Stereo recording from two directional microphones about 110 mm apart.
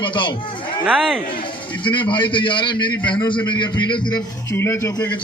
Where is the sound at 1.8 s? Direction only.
45° left (ahead or behind).